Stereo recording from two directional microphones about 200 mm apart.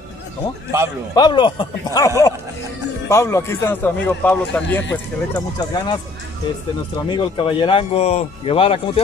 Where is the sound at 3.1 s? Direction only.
15° left (ahead or behind).